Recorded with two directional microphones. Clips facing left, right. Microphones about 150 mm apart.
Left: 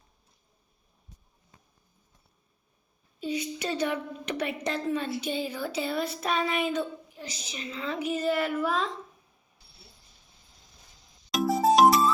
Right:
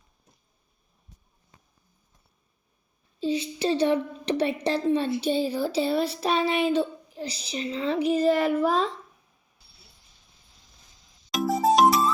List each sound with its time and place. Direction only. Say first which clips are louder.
3.2 s a woman's voice: right 5 dB; 30° right (ahead or behind)
11.3 s music: right 1 dB; centre (ahead or behind)